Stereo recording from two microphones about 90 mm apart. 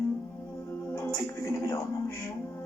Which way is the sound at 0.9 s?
30° left (ahead or behind).